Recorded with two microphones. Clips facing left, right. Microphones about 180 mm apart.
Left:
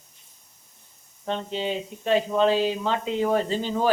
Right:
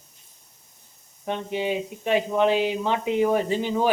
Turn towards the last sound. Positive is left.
turn(degrees=-15)  # may be behind; listen again after turning